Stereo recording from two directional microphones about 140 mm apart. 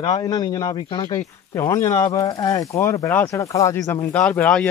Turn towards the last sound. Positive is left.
turn(degrees=10)  # may be behind; listen again after turning